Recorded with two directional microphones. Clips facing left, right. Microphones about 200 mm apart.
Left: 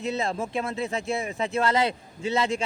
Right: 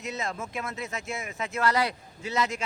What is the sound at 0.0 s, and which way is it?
Speech, 30° left (ahead or behind).